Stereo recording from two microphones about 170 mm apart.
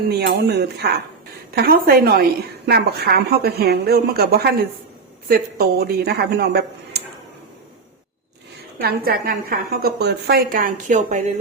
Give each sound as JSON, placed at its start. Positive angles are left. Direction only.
{"t": 0.1, "sound": "speech", "side_deg": -75}
{"t": 1.5, "sound": "a woman's voice", "side_deg": -65}
{"t": 8.8, "sound": "a woman's voice", "side_deg": -60}